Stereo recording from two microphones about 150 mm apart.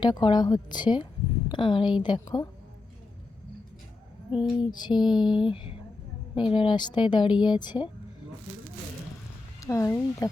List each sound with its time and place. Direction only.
0.0 s a woman's voice: 30° left (ahead or behind)
4.3 s speech: 5° right (ahead or behind)
4.7 s a woman's voice: 30° left (ahead or behind)
5.1 s a sound: 5° right (ahead or behind)
5.5 s a woman's voice: 40° left (ahead or behind)
9.6 s speech: 20° left (ahead or behind)